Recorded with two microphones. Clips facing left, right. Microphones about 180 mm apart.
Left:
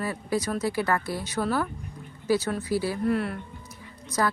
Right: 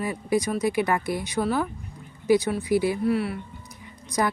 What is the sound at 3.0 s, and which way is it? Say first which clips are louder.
Speech: right 2 dB; 5° right (ahead or behind).